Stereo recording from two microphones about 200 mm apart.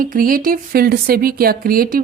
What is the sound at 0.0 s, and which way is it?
A woman's voice, 45° right (ahead or behind).